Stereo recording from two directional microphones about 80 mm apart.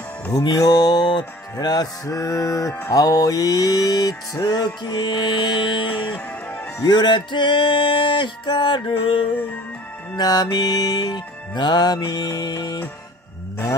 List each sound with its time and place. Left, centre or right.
0.3 s music: left
2.9 s mantra: left
6.8 s music: left
10.1 s mantra: left